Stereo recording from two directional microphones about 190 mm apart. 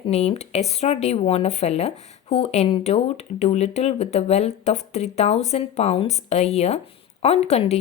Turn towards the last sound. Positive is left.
turn(degrees=35)  # may be behind; listen again after turning